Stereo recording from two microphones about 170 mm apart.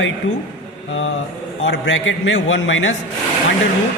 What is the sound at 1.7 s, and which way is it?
A man's voice, 90° left.